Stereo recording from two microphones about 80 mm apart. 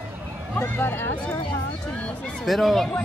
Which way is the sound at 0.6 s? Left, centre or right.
Left.